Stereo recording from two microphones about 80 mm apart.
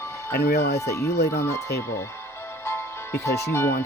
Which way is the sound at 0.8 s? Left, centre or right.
Left.